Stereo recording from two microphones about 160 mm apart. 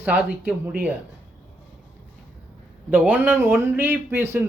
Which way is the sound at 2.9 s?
10° right (ahead or behind).